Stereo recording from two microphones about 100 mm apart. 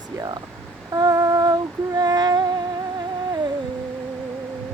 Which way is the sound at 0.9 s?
40° right (ahead or behind).